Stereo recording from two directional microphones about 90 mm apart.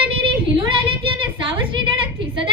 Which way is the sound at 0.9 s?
70° right (ahead or behind).